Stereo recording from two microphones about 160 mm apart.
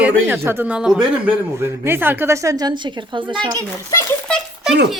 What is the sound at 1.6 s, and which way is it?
A woman's voice, 15° right (ahead or behind).